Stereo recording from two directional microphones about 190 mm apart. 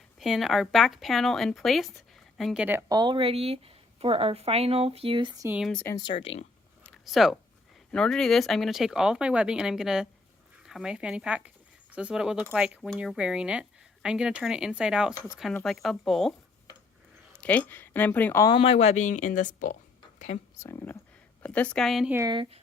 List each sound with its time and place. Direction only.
0.2 s speech: centre (ahead or behind)
3.0 s speech: 25° right (ahead or behind)
5.5 s speech: 5° left (ahead or behind)
6.0 s speech: 25° left (ahead or behind)
6.8 s a sound: centre (ahead or behind)
7.9 s speech: 5° left (ahead or behind)
15.1 s speech: 15° left (ahead or behind)
15.6 s speech: centre (ahead or behind)
17.3 s speech: 5° left (ahead or behind)
18.4 s speech: 30° left (ahead or behind)
20.6 s speech: 15° left (ahead or behind); by 22.2 s 5° right (ahead or behind)
22.2 s speech: 25° right (ahead or behind)